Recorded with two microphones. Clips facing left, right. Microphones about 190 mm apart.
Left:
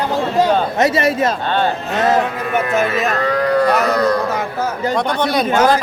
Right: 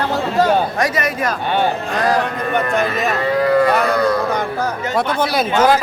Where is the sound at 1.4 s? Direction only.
15° right (ahead or behind).